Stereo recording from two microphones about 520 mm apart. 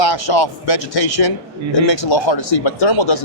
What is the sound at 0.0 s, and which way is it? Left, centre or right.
A man's voice, left.